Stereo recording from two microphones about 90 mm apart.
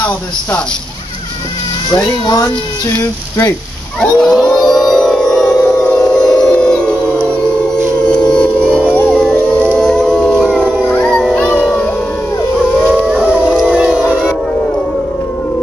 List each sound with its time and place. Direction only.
2.2 s speech: 45° left (ahead or behind)
4.2 s howl: centre (ahead or behind)
4.5 s music: 5° left (ahead or behind)
5.7 s singing bowl: 5° left (ahead or behind)
8.0 s music: 10° left (ahead or behind)
8.9 s howl: 10° left (ahead or behind)
10.9 s music: 10° left (ahead or behind)
12.5 s howl: 5° left (ahead or behind)
12.9 s howl: 10° right (ahead or behind)